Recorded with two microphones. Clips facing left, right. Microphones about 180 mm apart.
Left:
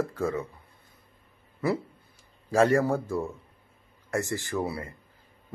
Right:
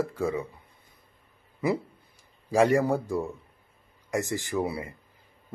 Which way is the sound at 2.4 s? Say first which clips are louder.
Even; 15° right (ahead or behind).